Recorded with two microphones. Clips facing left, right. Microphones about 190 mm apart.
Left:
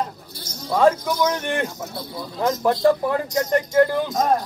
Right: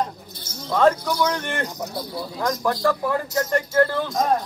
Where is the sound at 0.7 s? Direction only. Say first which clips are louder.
Left 1 dB; 10° left (ahead or behind).